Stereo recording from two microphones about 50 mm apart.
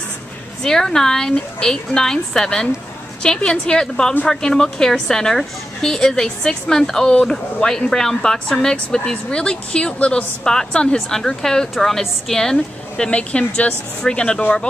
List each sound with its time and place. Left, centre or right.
0.6 s a woman's voice: centre
10.4 s a woman's voice: centre
13.1 s speech: left